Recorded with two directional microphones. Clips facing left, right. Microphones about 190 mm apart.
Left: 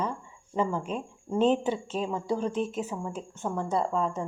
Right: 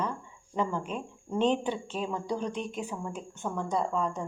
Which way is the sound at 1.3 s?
5° left (ahead or behind).